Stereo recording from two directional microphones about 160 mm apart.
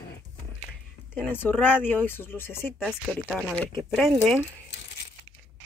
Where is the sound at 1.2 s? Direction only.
10° left (ahead or behind).